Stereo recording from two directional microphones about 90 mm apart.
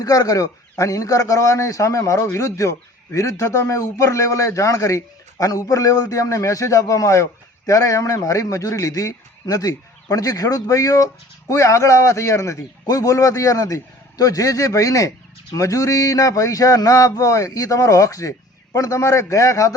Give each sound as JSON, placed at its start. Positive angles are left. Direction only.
{"t": 0.0, "sound": "a man's voice", "side_deg": 40}